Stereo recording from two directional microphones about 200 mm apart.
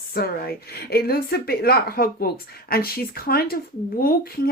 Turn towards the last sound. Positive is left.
turn(degrees=45)  # may be behind; listen again after turning